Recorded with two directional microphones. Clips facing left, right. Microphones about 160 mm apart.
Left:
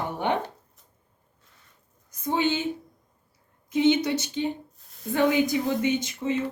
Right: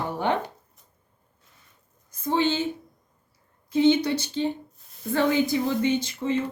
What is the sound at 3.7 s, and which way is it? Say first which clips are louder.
Speech: right 2 dB; 15° left (ahead or behind).